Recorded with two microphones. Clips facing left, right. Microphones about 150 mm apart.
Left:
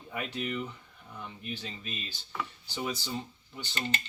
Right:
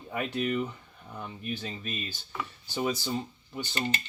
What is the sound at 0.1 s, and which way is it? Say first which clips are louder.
Speech: right 5 dB; 50° right (ahead or behind).